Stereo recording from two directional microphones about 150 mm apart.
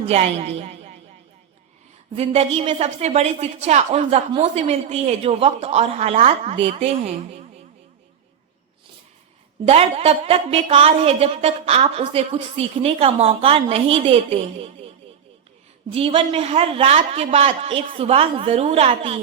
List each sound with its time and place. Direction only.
0.0 s a woman's voice: 45° right (ahead or behind)
2.1 s a man's voice: 45° right (ahead or behind)
9.6 s a woman's voice: 40° right (ahead or behind)
16.0 s a woman's voice: 40° right (ahead or behind)